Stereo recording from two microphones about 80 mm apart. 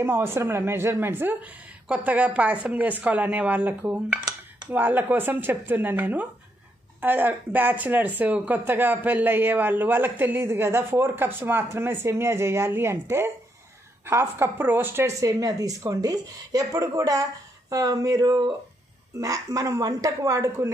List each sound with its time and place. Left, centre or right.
0.0 s a woman's voice: right